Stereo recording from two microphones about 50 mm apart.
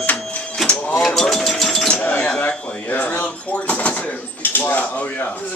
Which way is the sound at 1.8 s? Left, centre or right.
Left.